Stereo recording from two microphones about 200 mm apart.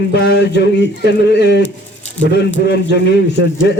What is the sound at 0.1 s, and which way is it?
A man's voice, 60° left (ahead or behind).